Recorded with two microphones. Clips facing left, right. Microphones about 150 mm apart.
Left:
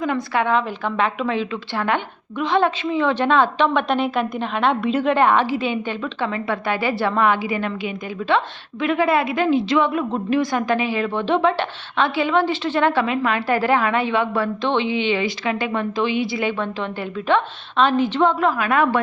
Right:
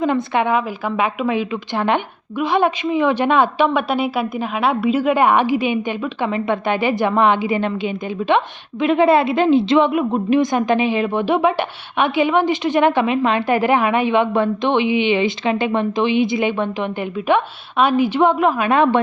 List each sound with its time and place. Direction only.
0.0 s a woman's voice: 20° right (ahead or behind)